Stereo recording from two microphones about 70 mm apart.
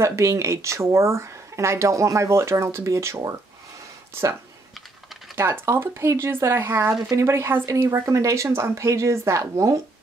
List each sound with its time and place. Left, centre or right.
0.0 s speech: right